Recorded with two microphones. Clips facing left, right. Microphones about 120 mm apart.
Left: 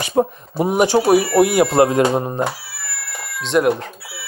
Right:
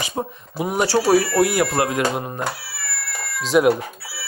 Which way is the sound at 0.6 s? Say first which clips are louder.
Left 4 dB; 20° left (ahead or behind).